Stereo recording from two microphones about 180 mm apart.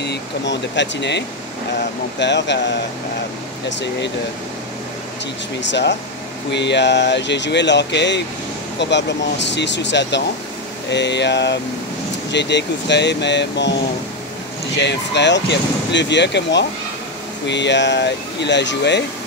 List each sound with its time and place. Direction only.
0.0 s speech: 75° left (ahead or behind)
5.6 s speech: 75° left (ahead or behind)
14.8 s speech: 75° left (ahead or behind)